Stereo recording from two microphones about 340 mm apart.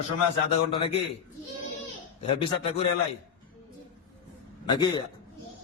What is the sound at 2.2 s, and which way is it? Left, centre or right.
Speech, centre.